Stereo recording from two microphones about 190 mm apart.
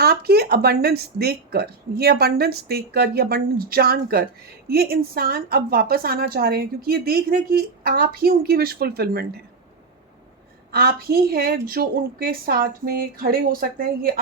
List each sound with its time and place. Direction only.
0.0 s a woman's voice: 55° right (ahead or behind)
10.7 s a woman's voice: 55° right (ahead or behind)